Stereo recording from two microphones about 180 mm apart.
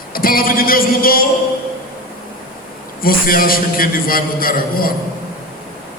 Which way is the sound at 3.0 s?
55° left (ahead or behind).